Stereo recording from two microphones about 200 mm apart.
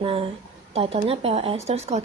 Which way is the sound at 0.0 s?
30° right (ahead or behind).